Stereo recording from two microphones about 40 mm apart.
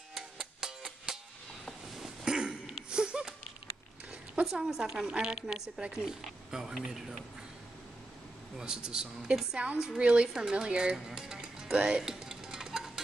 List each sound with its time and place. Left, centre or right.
0.1 s music: centre
1.7 s a sound: centre
2.2 s a sound: right
4.5 s a woman's voice: centre
5.0 s a woman's voice: right
6.0 s a woman's voice: centre
8.5 s a woman's voice: centre
11.1 s a woman's voice: centre
12.0 s music: centre